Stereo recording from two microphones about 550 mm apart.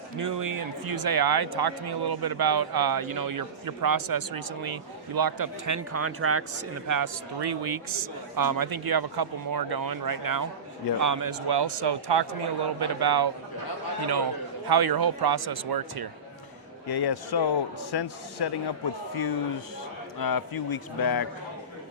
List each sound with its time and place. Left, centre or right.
0.2 s a man's voice: right
14.7 s speech: right
16.9 s a man's voice: left